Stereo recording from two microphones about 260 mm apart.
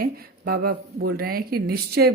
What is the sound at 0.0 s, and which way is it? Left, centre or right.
Speech, right.